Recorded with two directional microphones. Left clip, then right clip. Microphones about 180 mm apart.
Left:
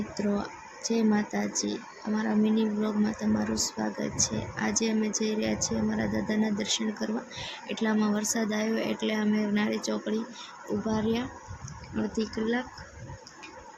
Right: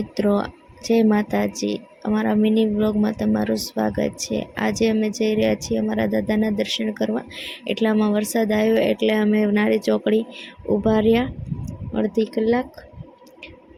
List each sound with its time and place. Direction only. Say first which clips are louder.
0.2 s speech: right 11 dB; 45° right (ahead or behind)